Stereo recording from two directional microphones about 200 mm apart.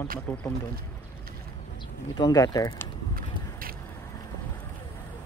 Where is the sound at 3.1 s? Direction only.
45° right (ahead or behind).